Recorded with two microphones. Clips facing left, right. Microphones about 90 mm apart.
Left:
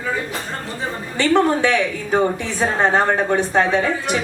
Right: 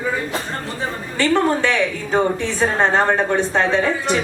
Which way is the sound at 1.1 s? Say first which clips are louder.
Left 1 dB; 15° left (ahead or behind).